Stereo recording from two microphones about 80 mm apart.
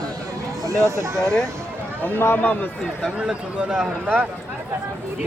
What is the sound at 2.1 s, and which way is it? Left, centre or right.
Speech, left.